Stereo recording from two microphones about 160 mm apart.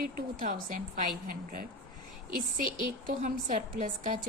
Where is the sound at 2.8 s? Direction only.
55° right (ahead or behind).